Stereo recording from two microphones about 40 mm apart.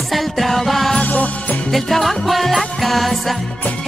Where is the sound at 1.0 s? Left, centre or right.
Left.